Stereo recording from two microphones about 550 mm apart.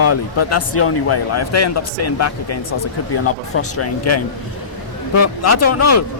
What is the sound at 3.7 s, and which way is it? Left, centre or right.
Speech, left.